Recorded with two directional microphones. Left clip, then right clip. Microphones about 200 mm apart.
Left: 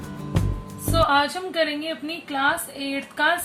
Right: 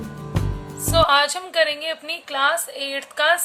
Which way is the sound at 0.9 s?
45° right (ahead or behind).